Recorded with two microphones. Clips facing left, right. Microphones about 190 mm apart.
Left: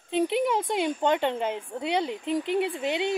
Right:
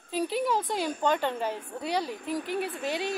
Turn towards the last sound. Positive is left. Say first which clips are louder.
# left 4 dB
turn(degrees=20)  # may be behind; listen again after turning